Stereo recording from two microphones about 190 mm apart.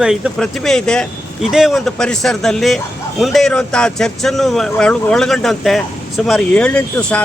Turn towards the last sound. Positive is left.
turn(degrees=5)  # may be behind; listen again after turning